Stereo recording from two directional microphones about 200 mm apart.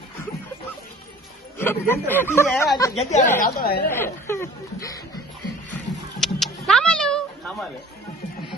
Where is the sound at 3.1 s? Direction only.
40° left (ahead or behind).